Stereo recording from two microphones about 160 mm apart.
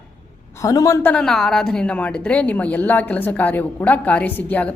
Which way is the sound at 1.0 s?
5° left (ahead or behind).